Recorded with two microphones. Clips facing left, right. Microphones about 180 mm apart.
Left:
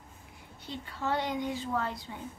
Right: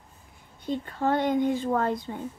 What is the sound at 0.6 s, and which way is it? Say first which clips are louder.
A woman's voice: right 9 dB; 50° right (ahead or behind).